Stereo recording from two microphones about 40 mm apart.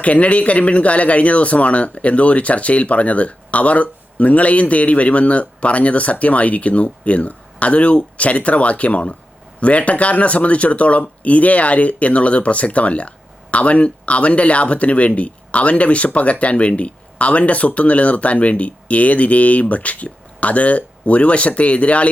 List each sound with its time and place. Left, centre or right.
0.0 s speech: left